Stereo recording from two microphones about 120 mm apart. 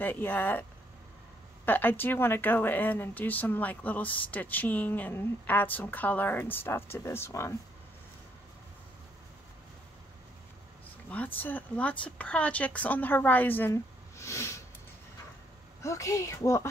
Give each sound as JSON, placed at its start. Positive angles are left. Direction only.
{"t": 0.0, "sound": "speech", "side_deg": 15}
{"t": 1.7, "sound": "speech", "side_deg": 15}
{"t": 11.1, "sound": "speech", "side_deg": 15}
{"t": 15.8, "sound": "a woman's voice", "side_deg": 25}